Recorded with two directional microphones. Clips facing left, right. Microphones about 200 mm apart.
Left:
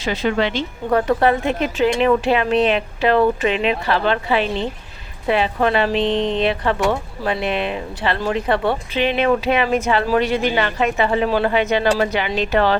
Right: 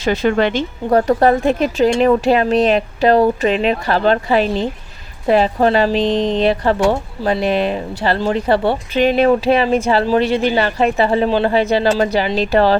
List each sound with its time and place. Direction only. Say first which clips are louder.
0.0 s a woman's voice: right 4 dB; 45° right (ahead or behind)